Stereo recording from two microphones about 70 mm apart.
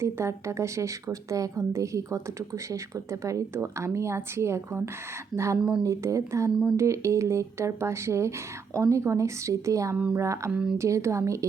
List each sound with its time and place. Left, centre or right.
0.0 s a woman's voice: right
5.5 s speech: centre
5.8 s a woman's voice: right
10.5 s speech: centre
10.8 s a woman's voice: right